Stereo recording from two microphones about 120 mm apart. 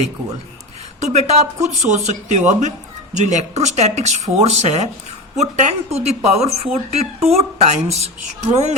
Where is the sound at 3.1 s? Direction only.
80° right.